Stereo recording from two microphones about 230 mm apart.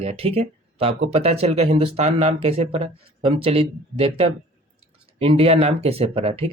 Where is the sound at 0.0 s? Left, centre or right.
Right.